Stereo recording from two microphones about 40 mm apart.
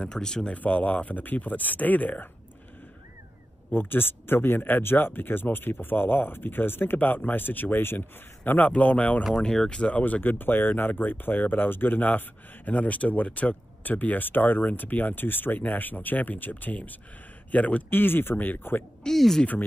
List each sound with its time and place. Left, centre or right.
0.0 s speech: centre
0.5 s speech: left
3.7 s speech: left
7.0 s speech: left
8.5 s a man's voice: left
9.3 s speech: centre
10.2 s a man's voice: left
17.8 s speech: left
18.3 s speech: left
18.6 s speech: left
19.1 s speech: centre